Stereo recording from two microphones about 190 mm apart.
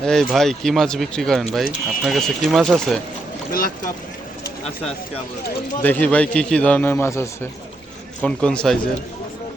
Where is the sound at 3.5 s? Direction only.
50° left (ahead or behind).